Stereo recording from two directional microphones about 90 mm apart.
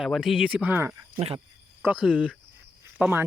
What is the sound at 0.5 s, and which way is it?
Chicken, 15° right (ahead or behind).